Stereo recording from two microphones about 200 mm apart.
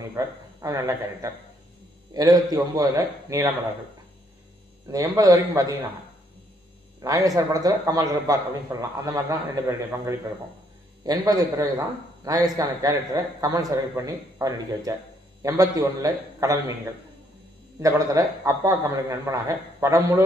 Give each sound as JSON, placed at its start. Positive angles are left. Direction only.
{"t": 0.0, "sound": "a man's voice", "side_deg": -15}
{"t": 4.8, "sound": "a man's voice", "side_deg": -20}
{"t": 7.0, "sound": "a man's voice", "side_deg": -15}